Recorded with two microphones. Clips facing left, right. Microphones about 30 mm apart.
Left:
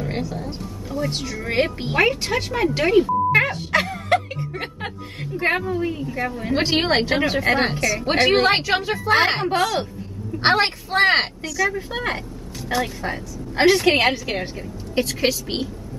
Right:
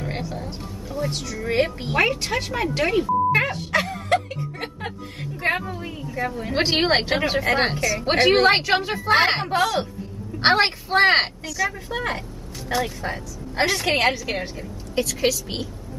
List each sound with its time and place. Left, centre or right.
0.0 s speech: centre
1.1 s a woman's voice: left
1.4 s speech: centre
2.0 s a woman's voice: centre
3.3 s a sound: centre
4.1 s music: centre
5.3 s a woman's voice: centre
6.5 s a woman's voice: centre
11.9 s a woman's voice: centre